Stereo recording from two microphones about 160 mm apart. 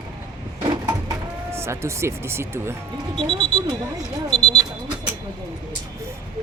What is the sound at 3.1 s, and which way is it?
Speech, 5° left (ahead or behind).